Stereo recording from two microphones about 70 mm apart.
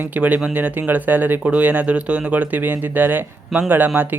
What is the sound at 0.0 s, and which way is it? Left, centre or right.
A man's voice, right.